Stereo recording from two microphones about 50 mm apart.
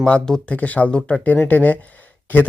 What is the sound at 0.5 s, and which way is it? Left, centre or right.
Speech, left.